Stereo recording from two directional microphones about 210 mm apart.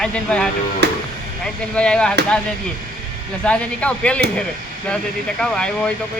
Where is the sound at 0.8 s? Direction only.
55° right (ahead or behind).